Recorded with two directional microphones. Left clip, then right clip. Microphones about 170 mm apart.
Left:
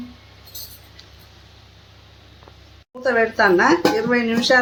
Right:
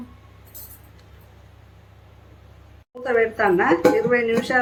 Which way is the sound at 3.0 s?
65° left (ahead or behind).